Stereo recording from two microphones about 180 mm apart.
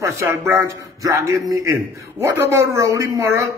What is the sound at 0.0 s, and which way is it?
Speech, 15° right (ahead or behind).